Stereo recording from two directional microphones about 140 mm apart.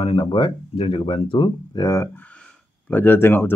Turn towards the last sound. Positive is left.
turn(degrees=15)  # may be behind; listen again after turning